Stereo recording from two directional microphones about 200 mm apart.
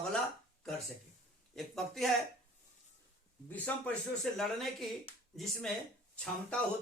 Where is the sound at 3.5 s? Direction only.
10° left (ahead or behind).